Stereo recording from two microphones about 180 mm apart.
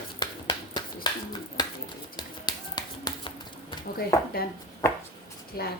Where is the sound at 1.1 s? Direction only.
25° left (ahead or behind).